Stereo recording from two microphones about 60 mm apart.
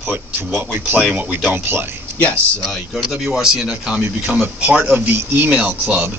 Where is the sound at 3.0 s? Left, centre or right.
Centre.